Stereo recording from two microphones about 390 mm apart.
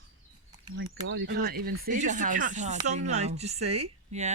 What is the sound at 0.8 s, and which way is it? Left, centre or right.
Speech, right.